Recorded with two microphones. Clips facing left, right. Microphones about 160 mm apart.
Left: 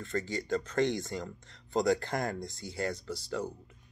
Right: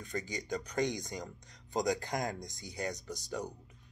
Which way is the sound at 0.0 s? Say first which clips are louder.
Left 5 dB; 15° right (ahead or behind).